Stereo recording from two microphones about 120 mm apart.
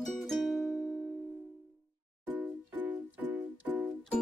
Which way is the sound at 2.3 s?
15° right (ahead or behind).